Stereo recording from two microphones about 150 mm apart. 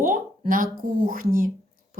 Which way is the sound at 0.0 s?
65° right (ahead or behind).